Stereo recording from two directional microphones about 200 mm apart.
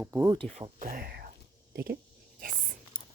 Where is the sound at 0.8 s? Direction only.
45° right (ahead or behind).